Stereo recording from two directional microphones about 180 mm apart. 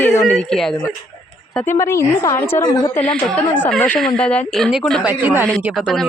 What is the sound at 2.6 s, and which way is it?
Speech, 25° left (ahead or behind).